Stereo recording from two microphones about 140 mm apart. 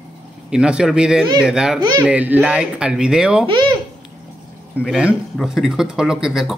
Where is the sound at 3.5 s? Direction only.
35° right (ahead or behind).